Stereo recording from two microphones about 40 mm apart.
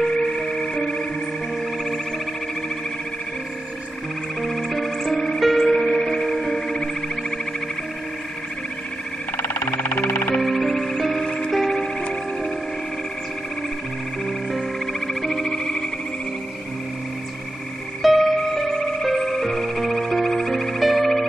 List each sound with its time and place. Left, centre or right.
0.0 s music: centre
4.4 s music: centre
9.4 s siren: left
10.4 s music: centre
14.2 s music: centre
18.0 s music: centre